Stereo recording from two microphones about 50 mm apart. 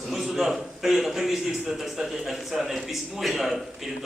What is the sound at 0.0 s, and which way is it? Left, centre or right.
A man's voice, centre.